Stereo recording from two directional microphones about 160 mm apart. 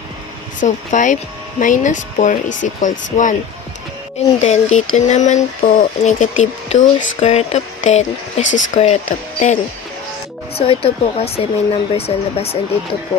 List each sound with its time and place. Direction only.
0.6 s speech: 50° left (ahead or behind)
4.4 s speech: 45° left (ahead or behind)